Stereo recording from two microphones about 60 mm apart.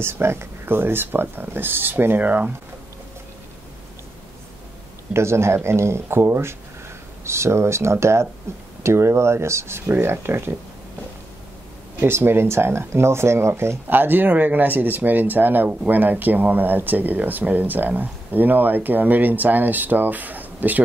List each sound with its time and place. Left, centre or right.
0.0 s speech: right
5.1 s speech: right
12.0 s speech: right